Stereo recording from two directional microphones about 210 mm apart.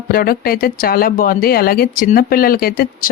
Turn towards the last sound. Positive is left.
turn(degrees=45)  # may be behind; listen again after turning